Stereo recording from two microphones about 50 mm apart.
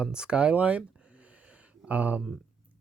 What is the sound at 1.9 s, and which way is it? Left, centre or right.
Speech, right.